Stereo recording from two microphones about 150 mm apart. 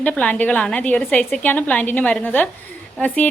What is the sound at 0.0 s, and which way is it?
A woman's voice, 10° left (ahead or behind).